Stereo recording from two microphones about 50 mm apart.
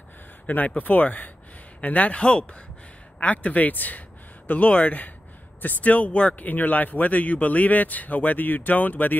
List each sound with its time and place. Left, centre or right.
0.5 s speech: left